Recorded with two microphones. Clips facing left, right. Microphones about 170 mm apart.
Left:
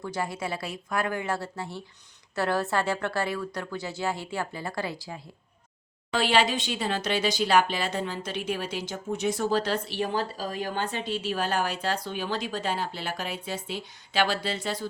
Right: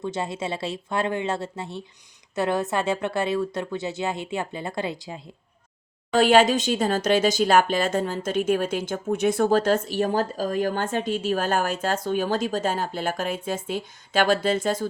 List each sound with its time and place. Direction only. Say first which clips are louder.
0.0 s speech: right 3 dB; 25° right (ahead or behind)
6.1 s speech: right 7 dB; 45° right (ahead or behind)